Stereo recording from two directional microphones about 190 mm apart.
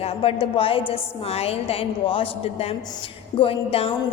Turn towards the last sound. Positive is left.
turn(degrees=30)  # may be behind; listen again after turning